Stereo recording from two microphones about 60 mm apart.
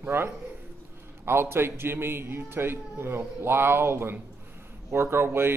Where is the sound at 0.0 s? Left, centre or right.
Right.